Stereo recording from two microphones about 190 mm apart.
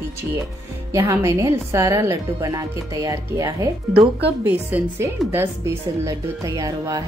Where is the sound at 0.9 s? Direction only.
15° right (ahead or behind).